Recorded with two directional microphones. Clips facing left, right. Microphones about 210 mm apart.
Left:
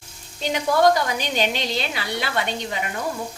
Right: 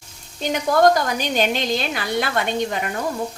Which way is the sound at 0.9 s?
45° right (ahead or behind).